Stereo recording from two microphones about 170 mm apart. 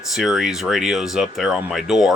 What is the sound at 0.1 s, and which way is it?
Speech, centre (ahead or behind).